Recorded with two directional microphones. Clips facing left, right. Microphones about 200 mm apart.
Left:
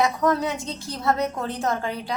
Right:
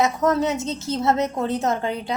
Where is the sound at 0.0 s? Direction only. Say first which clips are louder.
Right 2 dB; 25° right (ahead or behind).